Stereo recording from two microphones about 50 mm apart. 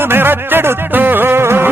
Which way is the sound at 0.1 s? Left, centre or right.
Right.